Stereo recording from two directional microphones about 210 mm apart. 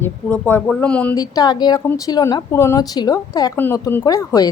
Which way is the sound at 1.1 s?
20° left (ahead or behind).